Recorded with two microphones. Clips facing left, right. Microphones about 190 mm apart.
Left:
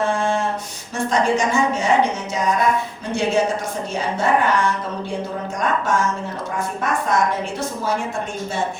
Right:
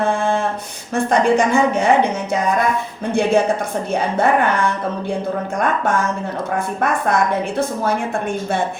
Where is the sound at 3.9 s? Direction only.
60° right (ahead or behind).